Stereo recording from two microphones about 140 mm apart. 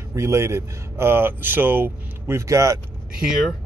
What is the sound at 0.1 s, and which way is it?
Speech, 20° right (ahead or behind).